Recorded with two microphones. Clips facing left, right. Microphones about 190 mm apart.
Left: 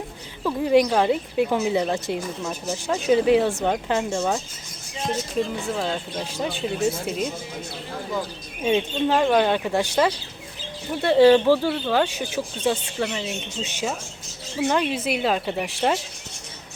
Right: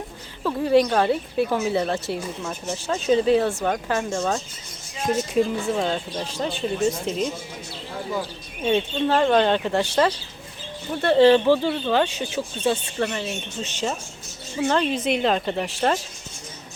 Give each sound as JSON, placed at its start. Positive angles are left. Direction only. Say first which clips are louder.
{"t": 0.4, "sound": "speech", "louder": "even", "side_deg": 15}
{"t": 5.4, "sound": "speech", "louder": "right 3 dB", "side_deg": -5}
{"t": 6.1, "sound": "speech", "louder": "even", "side_deg": 10}
{"t": 8.6, "sound": "speech", "louder": "even", "side_deg": 15}